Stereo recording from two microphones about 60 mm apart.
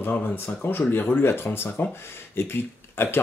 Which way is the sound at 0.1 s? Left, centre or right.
Left.